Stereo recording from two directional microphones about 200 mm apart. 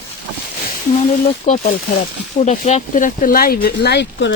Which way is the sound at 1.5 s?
35° left (ahead or behind).